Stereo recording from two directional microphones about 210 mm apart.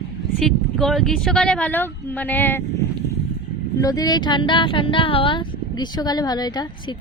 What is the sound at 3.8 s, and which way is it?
Speech, 15° left (ahead or behind).